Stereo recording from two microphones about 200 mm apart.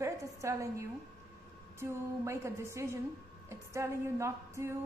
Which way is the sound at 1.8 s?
15° right (ahead or behind).